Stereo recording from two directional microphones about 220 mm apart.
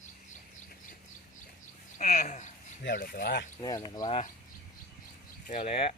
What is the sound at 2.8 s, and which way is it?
Speech, 50° left (ahead or behind).